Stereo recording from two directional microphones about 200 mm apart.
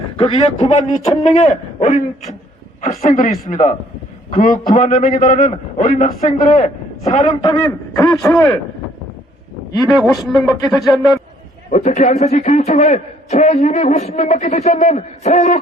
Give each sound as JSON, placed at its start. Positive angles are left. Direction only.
{"t": 0.2, "sound": "a man's voice", "side_deg": 30}
{"t": 7.0, "sound": "a man's voice", "side_deg": 30}
{"t": 9.7, "sound": "speech", "side_deg": 0}
{"t": 11.7, "sound": "a man's voice", "side_deg": 40}